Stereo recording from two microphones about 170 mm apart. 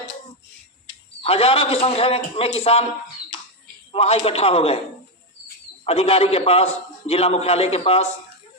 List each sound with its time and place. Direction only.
1.2 s a man's voice: 35° left (ahead or behind)
3.9 s a man's voice: 35° left (ahead or behind)
5.8 s a man's voice: 35° left (ahead or behind)